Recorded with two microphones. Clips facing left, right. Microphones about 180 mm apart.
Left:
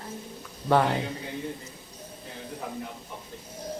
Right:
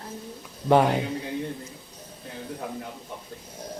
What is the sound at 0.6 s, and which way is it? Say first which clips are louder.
Speech: right 3 dB; 20° right (ahead or behind).